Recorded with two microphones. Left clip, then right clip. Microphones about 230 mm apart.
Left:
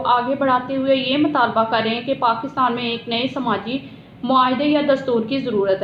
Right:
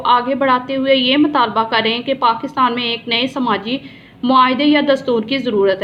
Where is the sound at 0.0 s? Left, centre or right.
Right.